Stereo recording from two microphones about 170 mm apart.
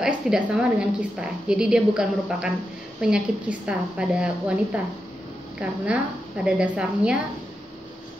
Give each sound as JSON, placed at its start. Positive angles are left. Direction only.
{"t": 0.0, "sound": "a woman's voice", "side_deg": -5}
{"t": 5.6, "sound": "a woman's voice", "side_deg": -5}